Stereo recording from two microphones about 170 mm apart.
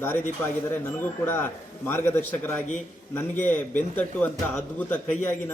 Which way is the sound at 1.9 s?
15° left (ahead or behind).